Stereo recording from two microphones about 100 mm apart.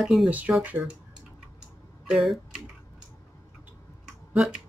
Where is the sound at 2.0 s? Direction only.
Centre (ahead or behind).